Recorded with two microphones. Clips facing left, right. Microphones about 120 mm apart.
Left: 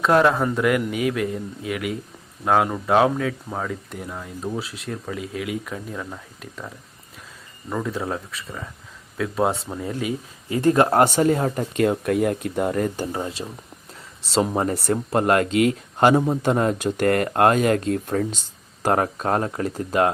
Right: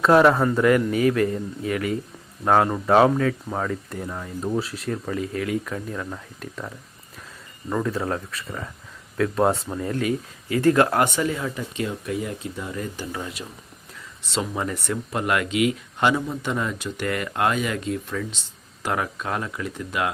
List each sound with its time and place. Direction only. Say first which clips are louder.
0.0 s speech: right 2 dB; centre (ahead or behind); by 13.1 s 55° left (ahead or behind)
13.1 s speech: left 4 dB; 30° left (ahead or behind)